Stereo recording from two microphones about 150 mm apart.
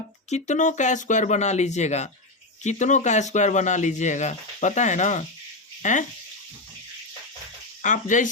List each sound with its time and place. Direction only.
0.3 s speech: 50° left (ahead or behind)
7.8 s speech: 55° left (ahead or behind)